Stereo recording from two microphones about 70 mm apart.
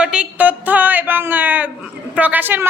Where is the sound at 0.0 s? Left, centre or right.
Centre.